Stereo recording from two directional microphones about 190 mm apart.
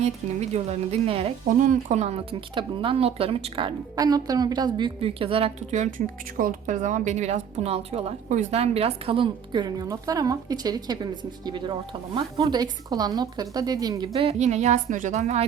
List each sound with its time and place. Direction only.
0.0 s a woman's voice: 35° right (ahead or behind)
6.3 s a woman's voice: 45° right (ahead or behind)